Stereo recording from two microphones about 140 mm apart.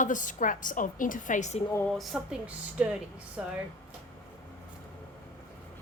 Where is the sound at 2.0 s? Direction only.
5° right (ahead or behind).